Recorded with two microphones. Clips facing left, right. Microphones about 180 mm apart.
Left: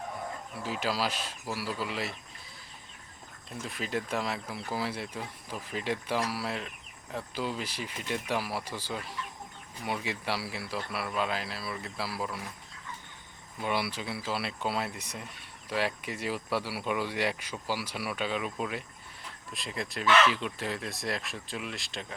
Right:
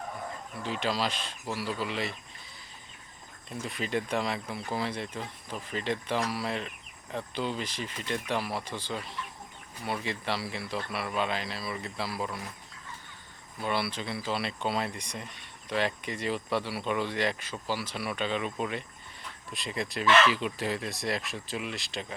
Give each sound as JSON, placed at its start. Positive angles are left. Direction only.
{"t": 0.5, "sound": "speech", "side_deg": 5}
{"t": 3.6, "sound": "speech", "side_deg": 0}
{"t": 13.6, "sound": "speech", "side_deg": 10}